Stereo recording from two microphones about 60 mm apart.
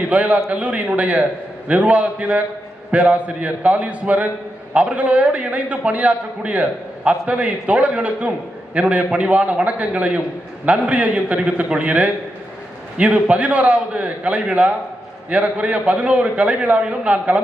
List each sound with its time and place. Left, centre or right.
0.0 s a man's voice: right